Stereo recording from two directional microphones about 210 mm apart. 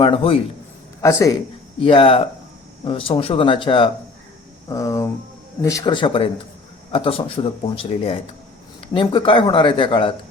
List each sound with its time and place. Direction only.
0.0 s a man's voice: 25° left (ahead or behind)
1.0 s speech: 15° left (ahead or behind)
1.8 s speech: 25° left (ahead or behind)